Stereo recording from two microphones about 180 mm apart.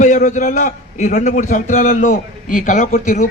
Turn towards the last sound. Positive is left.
turn(degrees=45)  # may be behind; listen again after turning